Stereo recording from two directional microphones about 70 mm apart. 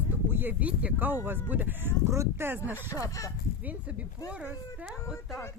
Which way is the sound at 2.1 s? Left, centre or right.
Right.